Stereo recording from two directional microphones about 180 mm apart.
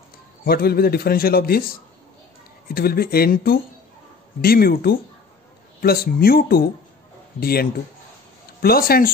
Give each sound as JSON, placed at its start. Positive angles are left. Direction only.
{"t": 0.5, "sound": "a man's voice", "side_deg": 60}
{"t": 2.7, "sound": "a man's voice", "side_deg": 55}